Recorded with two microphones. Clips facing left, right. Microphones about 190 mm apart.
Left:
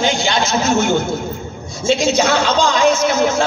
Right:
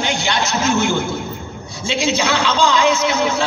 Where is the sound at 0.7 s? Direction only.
45° left (ahead or behind).